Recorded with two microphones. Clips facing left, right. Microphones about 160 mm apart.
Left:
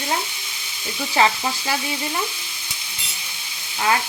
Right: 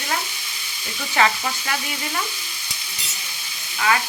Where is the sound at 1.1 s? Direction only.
25° left (ahead or behind).